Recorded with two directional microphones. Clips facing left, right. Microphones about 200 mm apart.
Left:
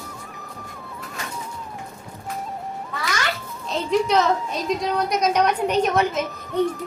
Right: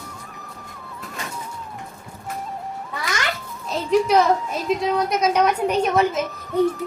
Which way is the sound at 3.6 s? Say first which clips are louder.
Right 2 dB; 5° right (ahead or behind).